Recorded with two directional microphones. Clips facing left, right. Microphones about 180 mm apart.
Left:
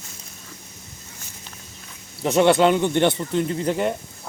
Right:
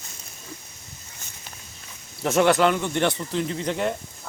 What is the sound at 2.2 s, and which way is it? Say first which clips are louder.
Speech: left 3 dB; 15° left (ahead or behind).